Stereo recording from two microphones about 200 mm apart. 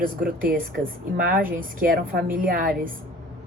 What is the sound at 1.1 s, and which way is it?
A woman's voice, 45° right (ahead or behind).